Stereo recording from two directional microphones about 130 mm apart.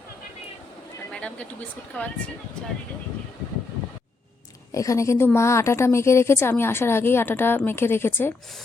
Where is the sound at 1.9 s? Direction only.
10° left (ahead or behind).